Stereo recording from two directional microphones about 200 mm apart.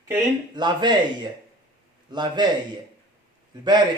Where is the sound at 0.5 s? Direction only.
20° right (ahead or behind).